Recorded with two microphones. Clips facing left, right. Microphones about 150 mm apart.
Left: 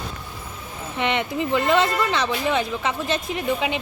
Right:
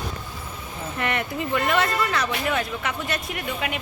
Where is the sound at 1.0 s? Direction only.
20° left (ahead or behind).